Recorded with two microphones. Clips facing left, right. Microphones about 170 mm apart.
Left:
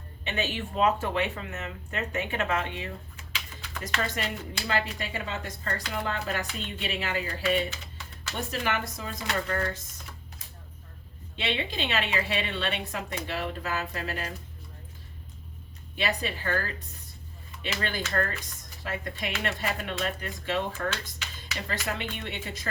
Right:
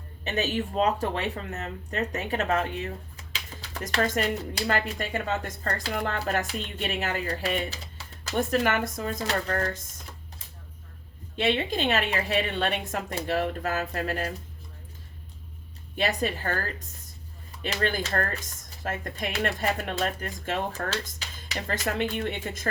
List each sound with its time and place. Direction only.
0.3 s speech: 40° right (ahead or behind)
8.4 s speech: 50° right (ahead or behind)
11.3 s speech: 45° right (ahead or behind)
16.0 s speech: 45° right (ahead or behind)
17.6 s speech: 45° right (ahead or behind)